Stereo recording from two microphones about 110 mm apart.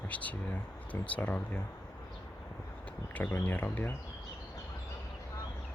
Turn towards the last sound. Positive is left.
turn(degrees=15)  # may be behind; listen again after turning